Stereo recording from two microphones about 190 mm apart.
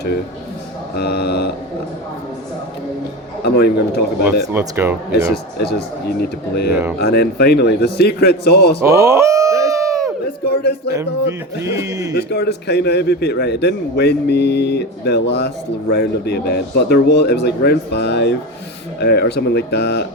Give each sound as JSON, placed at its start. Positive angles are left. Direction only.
{"t": 0.9, "sound": "a man's voice", "side_deg": 60}
{"t": 3.4, "sound": "a man's voice", "side_deg": 55}
{"t": 4.2, "sound": "speech", "side_deg": -10}
{"t": 5.3, "sound": "a man's voice", "side_deg": 55}
{"t": 8.8, "sound": "a sound", "side_deg": -15}
{"t": 10.2, "sound": "music", "side_deg": 55}
{"t": 10.9, "sound": "a sound", "side_deg": -15}
{"t": 12.1, "sound": "a man's voice", "side_deg": 60}